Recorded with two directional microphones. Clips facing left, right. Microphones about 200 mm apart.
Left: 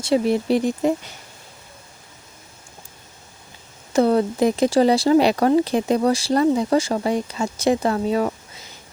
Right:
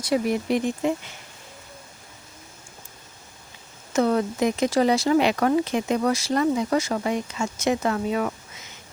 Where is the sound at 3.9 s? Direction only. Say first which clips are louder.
Left 4 dB; 30° left (ahead or behind).